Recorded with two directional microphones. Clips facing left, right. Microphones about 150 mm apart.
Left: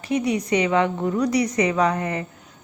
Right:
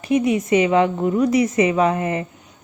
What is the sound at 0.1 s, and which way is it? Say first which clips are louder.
A woman's voice: right 4 dB; 25° right (ahead or behind).